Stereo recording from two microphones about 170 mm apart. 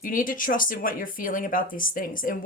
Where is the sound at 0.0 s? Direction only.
55° left (ahead or behind).